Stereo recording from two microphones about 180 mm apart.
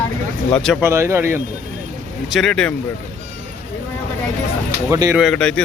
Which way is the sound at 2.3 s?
5° left (ahead or behind).